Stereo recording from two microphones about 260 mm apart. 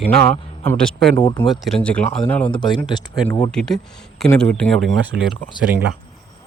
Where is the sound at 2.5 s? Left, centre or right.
Centre.